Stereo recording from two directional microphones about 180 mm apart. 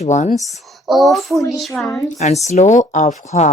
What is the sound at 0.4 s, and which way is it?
Speech, centre (ahead or behind).